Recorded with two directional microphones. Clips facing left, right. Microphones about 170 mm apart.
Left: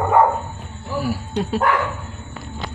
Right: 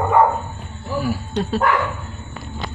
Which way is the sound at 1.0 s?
5° left (ahead or behind).